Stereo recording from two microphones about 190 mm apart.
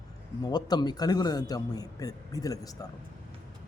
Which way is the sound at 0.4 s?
20° left (ahead or behind).